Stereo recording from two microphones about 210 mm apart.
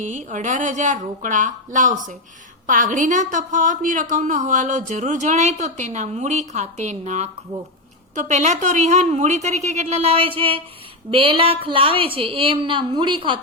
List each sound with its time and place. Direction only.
0.0 s a woman's voice: 35° right (ahead or behind)